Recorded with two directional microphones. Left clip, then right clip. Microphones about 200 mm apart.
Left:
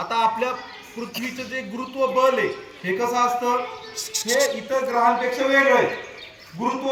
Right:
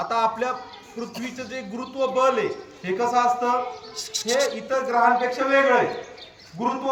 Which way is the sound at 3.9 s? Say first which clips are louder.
Left 2 dB; 25° right (ahead or behind).